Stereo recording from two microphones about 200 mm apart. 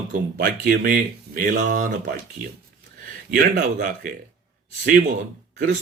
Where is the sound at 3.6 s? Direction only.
45° right (ahead or behind).